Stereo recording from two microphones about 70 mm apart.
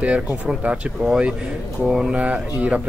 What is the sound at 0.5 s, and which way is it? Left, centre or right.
A man's voice, centre.